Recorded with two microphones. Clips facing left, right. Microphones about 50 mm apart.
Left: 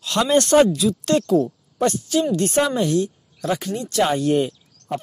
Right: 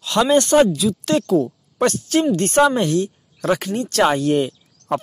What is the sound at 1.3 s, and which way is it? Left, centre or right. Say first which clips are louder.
Speech: right 1 dB; right.